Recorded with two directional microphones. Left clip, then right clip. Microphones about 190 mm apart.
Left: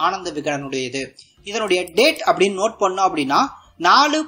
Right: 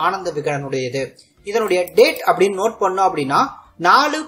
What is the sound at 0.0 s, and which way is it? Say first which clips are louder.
Speech: right 1 dB; 35° left (ahead or behind).